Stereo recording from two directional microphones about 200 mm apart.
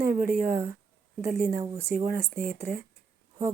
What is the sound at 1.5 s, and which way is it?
Speech, 15° right (ahead or behind).